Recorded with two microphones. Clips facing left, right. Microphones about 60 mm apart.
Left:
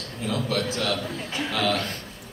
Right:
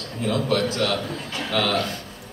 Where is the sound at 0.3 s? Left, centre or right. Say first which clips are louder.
Right 4 dB; right.